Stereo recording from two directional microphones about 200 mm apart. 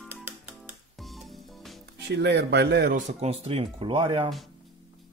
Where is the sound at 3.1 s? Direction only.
30° right (ahead or behind).